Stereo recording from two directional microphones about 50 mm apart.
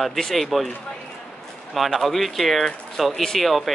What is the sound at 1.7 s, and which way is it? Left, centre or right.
Speech, centre.